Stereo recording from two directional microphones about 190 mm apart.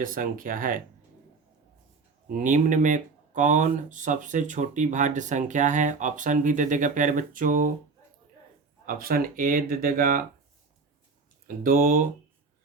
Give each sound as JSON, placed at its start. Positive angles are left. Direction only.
{"t": 0.0, "sound": "speech", "side_deg": -45}
{"t": 2.2, "sound": "speech", "side_deg": -45}
{"t": 8.9, "sound": "speech", "side_deg": -50}
{"t": 11.4, "sound": "speech", "side_deg": -50}